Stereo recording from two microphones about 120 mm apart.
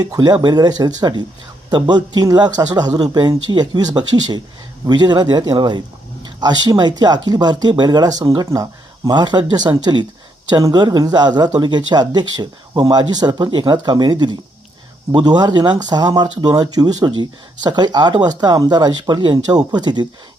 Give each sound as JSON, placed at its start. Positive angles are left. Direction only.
{"t": 0.0, "sound": "speech", "side_deg": -35}